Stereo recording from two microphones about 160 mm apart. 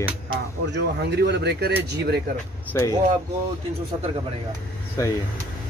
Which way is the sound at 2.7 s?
15° left (ahead or behind).